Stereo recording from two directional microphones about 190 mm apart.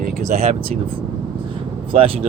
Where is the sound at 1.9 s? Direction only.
30° right (ahead or behind).